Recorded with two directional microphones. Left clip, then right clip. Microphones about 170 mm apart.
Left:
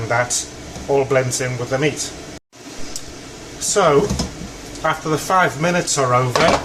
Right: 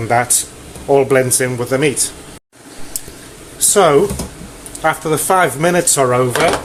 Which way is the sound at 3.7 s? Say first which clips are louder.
Right 4 dB; 60° right (ahead or behind).